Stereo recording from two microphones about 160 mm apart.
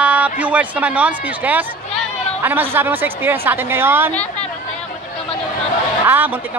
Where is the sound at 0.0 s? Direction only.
10° right (ahead or behind).